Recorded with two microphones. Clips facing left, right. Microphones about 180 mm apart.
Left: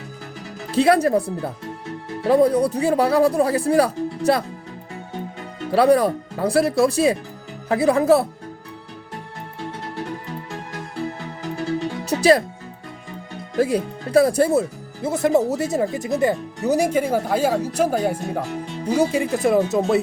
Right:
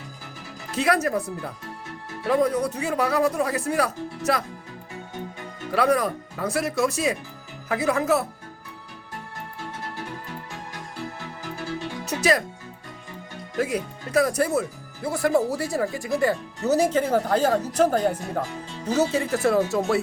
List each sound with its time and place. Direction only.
0.7 s speech: 30° left (ahead or behind)
5.7 s speech: 30° left (ahead or behind)
12.0 s music: 30° left (ahead or behind)
13.6 s speech: 30° left (ahead or behind)